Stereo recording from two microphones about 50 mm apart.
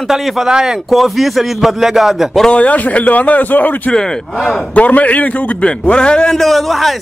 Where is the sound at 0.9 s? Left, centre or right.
Centre.